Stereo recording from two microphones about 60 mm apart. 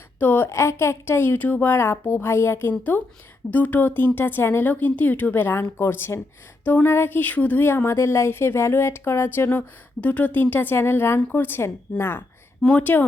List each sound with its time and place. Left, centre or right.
0.2 s speech: left
0.5 s speech: left
1.7 s speech: left
3.5 s speech: left
4.7 s speech: left
7.6 s speech: left
12.6 s speech: left